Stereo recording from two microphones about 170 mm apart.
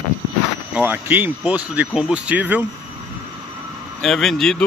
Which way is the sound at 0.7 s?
10° right (ahead or behind).